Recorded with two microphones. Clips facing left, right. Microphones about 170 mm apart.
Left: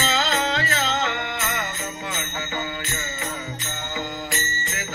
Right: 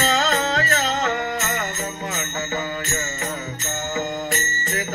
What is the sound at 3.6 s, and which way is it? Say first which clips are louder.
Music: right 5 dB; 45° right (ahead or behind).